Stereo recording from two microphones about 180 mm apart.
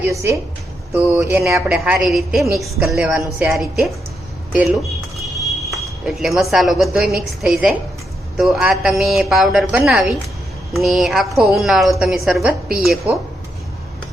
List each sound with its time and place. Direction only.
0.0 s a woman's voice: 15° right (ahead or behind)
5.7 s a woman's voice: centre (ahead or behind)